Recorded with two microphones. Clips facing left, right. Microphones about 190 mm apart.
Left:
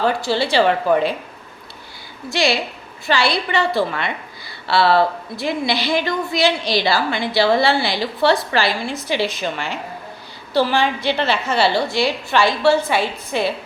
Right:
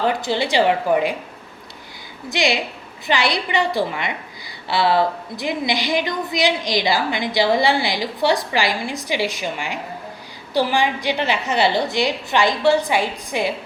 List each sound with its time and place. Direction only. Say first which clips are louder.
0.0 s a woman's voice: left 1 dB; 20° right (ahead or behind)
2.3 s a woman's voice: left 1 dB; 20° right (ahead or behind)